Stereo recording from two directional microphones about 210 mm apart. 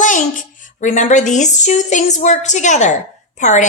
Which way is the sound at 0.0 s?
40° left (ahead or behind).